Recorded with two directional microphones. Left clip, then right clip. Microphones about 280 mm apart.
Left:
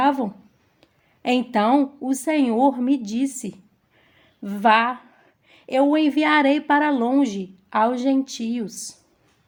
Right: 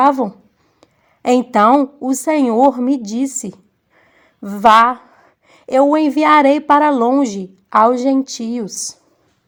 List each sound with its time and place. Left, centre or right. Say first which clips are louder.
0.0 s a woman's voice: right 7 dB; right